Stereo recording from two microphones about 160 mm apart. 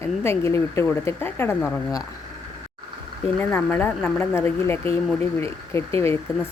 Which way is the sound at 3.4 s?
10° left (ahead or behind).